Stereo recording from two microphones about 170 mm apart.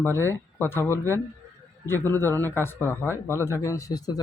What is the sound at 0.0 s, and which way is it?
Speech, 15° left (ahead or behind).